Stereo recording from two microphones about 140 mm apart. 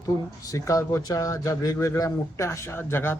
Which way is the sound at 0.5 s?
25° left (ahead or behind).